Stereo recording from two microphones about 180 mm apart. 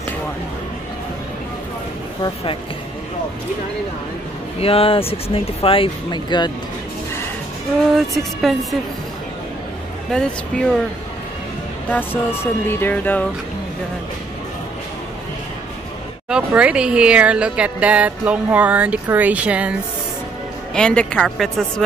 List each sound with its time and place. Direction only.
4.6 s speech: 30° left (ahead or behind)
7.9 s a woman's voice: centre (ahead or behind)
10.1 s a woman's voice: 5° left (ahead or behind)
11.9 s speech: 10° left (ahead or behind)
16.3 s speech: 5° right (ahead or behind)
20.7 s a woman's voice: 5° left (ahead or behind)